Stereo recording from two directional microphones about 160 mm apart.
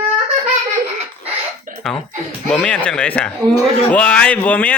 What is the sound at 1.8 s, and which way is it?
A man's voice, centre (ahead or behind).